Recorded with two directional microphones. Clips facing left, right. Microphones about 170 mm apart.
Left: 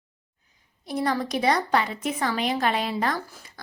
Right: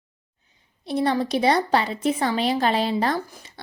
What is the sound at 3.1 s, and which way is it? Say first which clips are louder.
Speech: right 4 dB; 20° right (ahead or behind).